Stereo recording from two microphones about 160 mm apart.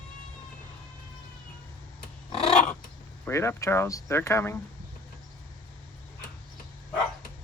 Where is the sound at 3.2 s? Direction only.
15° left (ahead or behind).